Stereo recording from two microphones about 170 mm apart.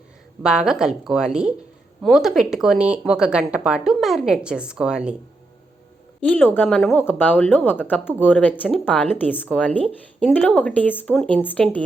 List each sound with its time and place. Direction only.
0.4 s speech: 5° right (ahead or behind)
6.1 s speech: 5° left (ahead or behind)